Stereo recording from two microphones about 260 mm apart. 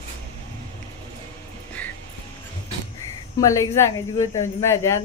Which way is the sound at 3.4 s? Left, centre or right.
Centre.